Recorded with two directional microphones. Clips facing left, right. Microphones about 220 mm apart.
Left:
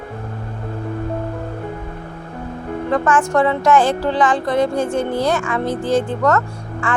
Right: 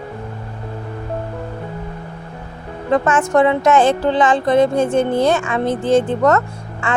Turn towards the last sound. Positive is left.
turn(degrees=-20)  # may be behind; listen again after turning